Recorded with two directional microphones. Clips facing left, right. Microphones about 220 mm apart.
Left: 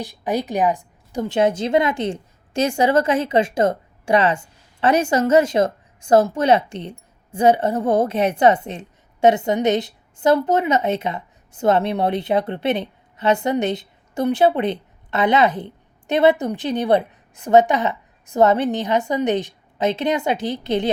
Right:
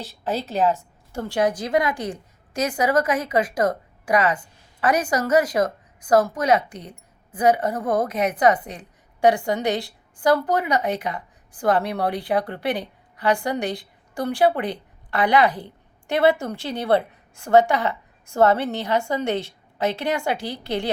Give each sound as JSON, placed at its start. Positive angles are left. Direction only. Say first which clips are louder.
{"t": 0.0, "sound": "a woman's voice", "louder": "left 4 dB", "side_deg": 15}